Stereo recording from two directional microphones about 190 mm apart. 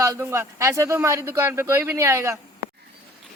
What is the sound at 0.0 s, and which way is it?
Speech, 15° right (ahead or behind).